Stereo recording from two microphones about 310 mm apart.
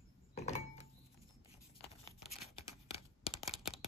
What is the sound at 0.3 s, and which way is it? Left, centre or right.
Door, left.